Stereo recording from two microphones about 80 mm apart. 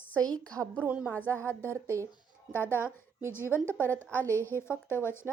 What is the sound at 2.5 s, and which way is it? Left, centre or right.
A woman's voice, left.